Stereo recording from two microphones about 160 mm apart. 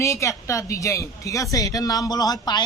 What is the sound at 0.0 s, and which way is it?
Speech, 20° left (ahead or behind).